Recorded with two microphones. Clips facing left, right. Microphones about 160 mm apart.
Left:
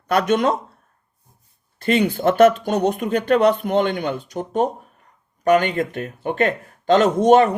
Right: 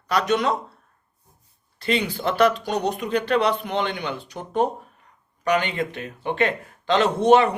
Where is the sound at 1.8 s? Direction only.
50° left (ahead or behind).